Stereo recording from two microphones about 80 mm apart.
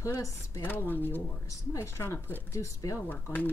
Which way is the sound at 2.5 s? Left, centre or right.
Left.